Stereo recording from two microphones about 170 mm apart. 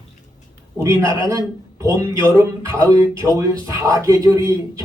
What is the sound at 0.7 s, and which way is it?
A man's voice, 15° right (ahead or behind).